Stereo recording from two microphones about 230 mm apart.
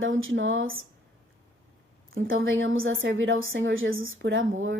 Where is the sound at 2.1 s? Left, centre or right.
Right.